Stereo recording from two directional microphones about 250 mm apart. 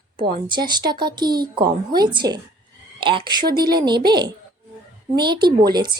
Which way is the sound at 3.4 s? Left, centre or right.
Right.